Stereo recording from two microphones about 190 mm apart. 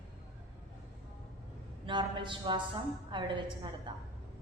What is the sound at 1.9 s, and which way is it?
A woman's voice, 25° right (ahead or behind).